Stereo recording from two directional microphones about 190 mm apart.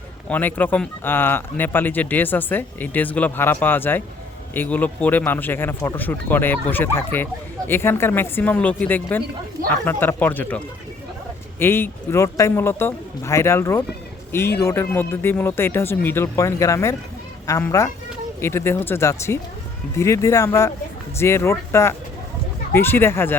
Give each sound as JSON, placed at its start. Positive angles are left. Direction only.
{"t": 0.3, "sound": "speech", "side_deg": 10}
{"t": 11.6, "sound": "speech", "side_deg": 10}